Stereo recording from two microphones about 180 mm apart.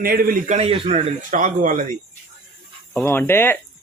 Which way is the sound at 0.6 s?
30° right (ahead or behind).